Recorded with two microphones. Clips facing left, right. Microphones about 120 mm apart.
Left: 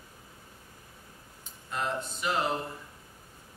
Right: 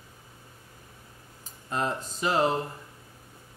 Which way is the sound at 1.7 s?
40° right (ahead or behind).